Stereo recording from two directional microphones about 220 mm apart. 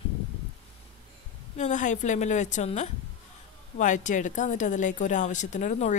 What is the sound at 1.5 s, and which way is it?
Speech, 35° left (ahead or behind).